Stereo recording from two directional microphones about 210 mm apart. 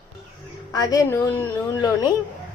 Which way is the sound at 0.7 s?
15° left (ahead or behind).